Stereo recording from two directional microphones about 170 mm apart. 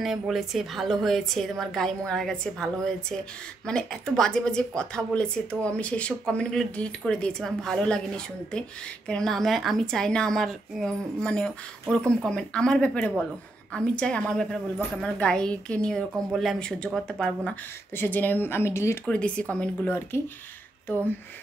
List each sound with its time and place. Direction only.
0.0 s a woman's voice: centre (ahead or behind)